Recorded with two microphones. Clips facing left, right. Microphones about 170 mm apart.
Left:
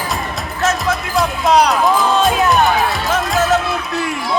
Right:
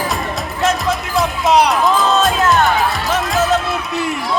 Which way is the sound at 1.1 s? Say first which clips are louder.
Even; centre (ahead or behind).